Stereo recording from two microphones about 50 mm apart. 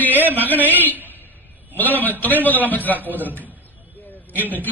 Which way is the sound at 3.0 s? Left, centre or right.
Right.